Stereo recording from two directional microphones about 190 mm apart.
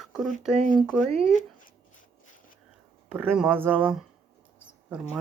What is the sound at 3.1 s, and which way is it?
Speech, 5° right (ahead or behind).